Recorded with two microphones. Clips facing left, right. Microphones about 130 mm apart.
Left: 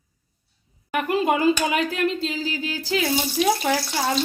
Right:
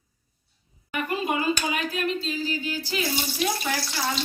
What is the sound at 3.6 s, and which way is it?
Speech, 75° left (ahead or behind).